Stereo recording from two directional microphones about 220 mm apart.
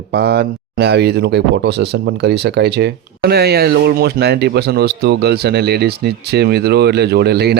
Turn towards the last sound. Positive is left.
turn(degrees=-45)  # may be behind; listen again after turning